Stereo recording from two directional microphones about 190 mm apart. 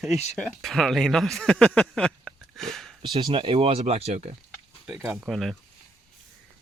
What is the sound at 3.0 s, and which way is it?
Speech, 25° right (ahead or behind).